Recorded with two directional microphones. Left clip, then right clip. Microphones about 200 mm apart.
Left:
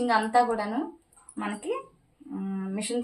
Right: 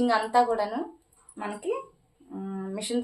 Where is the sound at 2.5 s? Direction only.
15° right (ahead or behind).